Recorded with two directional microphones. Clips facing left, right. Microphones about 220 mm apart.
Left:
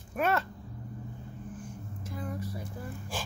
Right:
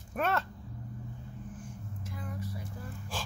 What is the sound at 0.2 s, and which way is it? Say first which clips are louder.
Speech: left 3 dB; 5° left (ahead or behind).